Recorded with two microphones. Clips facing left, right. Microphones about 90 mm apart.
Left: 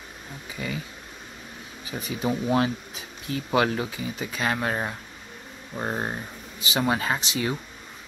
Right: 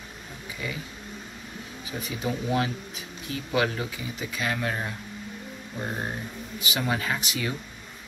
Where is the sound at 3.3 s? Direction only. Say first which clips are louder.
Left 3 dB; 40° left (ahead or behind).